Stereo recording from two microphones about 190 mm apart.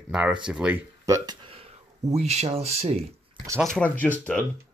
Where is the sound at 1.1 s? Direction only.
15° right (ahead or behind).